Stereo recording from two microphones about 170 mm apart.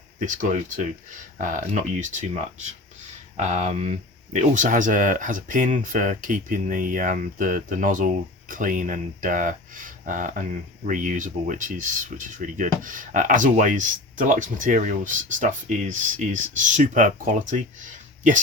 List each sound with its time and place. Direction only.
0.3 s speech: 45° right (ahead or behind)